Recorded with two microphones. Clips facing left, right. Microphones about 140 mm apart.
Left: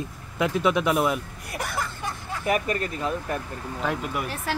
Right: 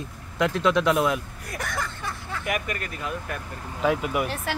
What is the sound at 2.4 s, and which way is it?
Speech, 35° left (ahead or behind).